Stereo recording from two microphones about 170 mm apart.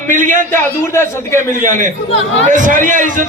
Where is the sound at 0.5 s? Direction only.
15° left (ahead or behind).